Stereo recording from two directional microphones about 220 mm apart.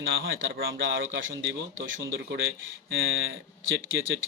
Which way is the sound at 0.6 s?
55° right (ahead or behind).